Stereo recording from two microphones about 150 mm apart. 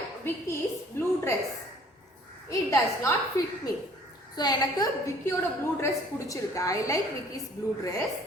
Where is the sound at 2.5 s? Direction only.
20° left (ahead or behind).